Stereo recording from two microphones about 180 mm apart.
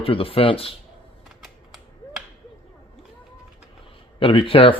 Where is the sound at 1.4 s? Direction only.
Centre (ahead or behind).